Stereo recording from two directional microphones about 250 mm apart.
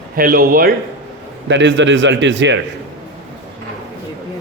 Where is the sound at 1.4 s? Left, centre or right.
Right.